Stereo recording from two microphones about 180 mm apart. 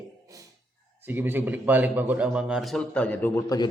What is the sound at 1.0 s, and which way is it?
A man's voice, 10° right (ahead or behind).